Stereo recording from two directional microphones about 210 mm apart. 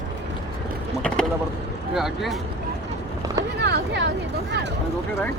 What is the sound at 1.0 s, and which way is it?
Vehicle, 5° left (ahead or behind).